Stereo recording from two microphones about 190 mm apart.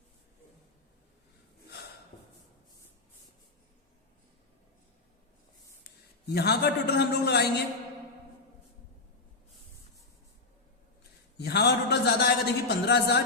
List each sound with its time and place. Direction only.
1.6 s a sound: 60° left (ahead or behind)
6.2 s a man's voice: 60° left (ahead or behind)
11.3 s a man's voice: 60° left (ahead or behind)